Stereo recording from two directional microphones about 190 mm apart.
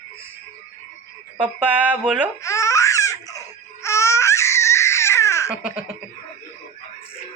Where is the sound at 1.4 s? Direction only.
10° right (ahead or behind).